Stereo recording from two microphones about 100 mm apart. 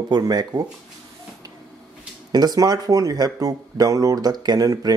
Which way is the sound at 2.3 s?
40° right (ahead or behind).